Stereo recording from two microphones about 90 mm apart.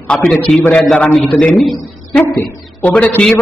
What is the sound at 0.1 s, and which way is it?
A man's voice, 10° left (ahead or behind).